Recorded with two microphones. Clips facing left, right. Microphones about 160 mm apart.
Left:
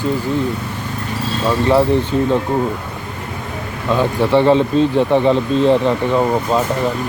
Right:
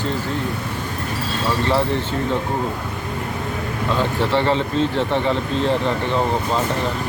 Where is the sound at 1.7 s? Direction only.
15° left (ahead or behind).